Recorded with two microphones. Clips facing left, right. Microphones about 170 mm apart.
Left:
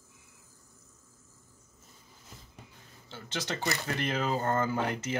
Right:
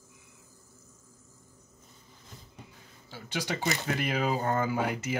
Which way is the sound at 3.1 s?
10° right (ahead or behind).